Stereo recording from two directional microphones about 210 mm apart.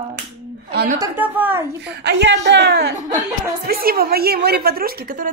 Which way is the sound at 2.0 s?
55° right (ahead or behind).